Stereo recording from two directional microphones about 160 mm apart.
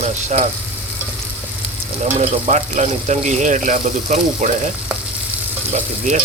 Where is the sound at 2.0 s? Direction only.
45° right (ahead or behind).